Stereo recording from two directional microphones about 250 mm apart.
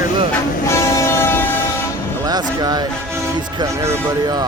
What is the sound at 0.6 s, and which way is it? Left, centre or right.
Train, centre.